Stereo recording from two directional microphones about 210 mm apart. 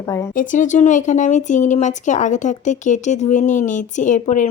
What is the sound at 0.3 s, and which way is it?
Speech, 40° left (ahead or behind).